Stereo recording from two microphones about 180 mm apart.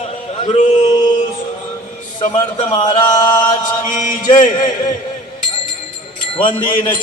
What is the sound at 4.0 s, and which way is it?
Mantra, 45° left (ahead or behind).